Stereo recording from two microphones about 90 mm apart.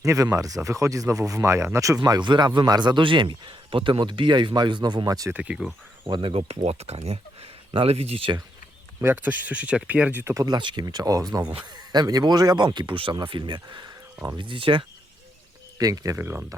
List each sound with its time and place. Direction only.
0.0 s speech: 35° right (ahead or behind)
2.0 s speech: 50° right (ahead or behind)
5.3 s speech: 15° right (ahead or behind)
6.1 s speech: 65° right (ahead or behind); by 8.4 s 90° right
9.0 s speech: 25° right (ahead or behind)
9.5 s speech: 15° right (ahead or behind)
10.4 s speech: 55° right (ahead or behind)
14.3 s speech: 65° right (ahead or behind)
15.8 s speech: 40° right (ahead or behind)
16.1 s speech: 30° right (ahead or behind)